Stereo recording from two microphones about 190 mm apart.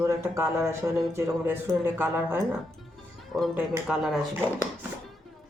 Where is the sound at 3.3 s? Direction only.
Centre (ahead or behind).